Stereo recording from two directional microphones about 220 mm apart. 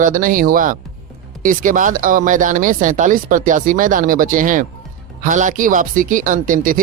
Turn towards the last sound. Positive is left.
turn(degrees=-35)  # may be behind; listen again after turning